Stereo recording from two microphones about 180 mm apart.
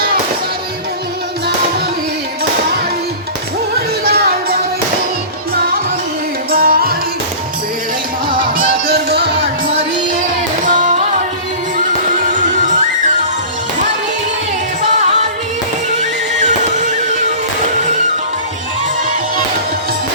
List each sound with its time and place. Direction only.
4.0 s music: 60° right (ahead or behind)
6.5 s music: 55° right (ahead or behind)
8.4 s music: 55° right (ahead or behind)
10.8 s music: 45° right (ahead or behind)
16.0 s music: 40° right (ahead or behind)